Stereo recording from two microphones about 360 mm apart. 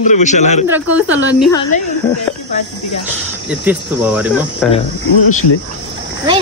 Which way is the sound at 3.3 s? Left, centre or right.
Centre.